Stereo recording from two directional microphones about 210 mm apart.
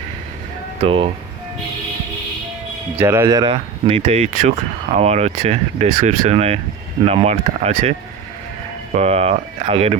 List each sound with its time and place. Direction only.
0.8 s speech: 25° right (ahead or behind)
3.0 s speech: 10° right (ahead or behind); by 7.9 s 35° right (ahead or behind)
9.0 s speech: 30° right (ahead or behind)